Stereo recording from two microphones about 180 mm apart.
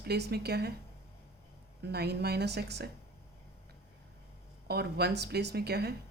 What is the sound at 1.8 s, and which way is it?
A woman's voice, 65° right (ahead or behind).